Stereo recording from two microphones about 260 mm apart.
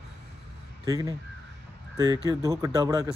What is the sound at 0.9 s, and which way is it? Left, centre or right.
Speech, centre.